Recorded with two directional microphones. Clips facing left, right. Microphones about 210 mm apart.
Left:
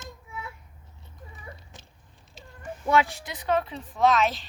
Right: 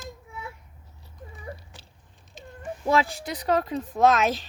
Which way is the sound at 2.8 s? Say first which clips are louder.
Even; 30° right (ahead or behind).